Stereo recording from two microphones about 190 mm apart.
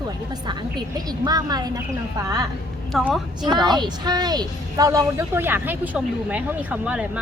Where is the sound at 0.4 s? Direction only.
20° right (ahead or behind).